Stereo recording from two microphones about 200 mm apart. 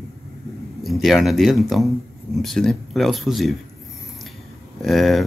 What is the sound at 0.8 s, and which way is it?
Speech, centre (ahead or behind).